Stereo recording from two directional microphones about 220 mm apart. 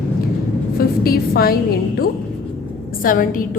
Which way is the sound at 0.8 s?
45° left (ahead or behind).